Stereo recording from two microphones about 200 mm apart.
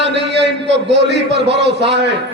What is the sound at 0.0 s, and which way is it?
A man's voice, 60° right (ahead or behind).